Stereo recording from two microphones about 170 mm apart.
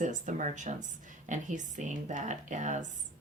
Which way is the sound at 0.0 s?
50° right (ahead or behind).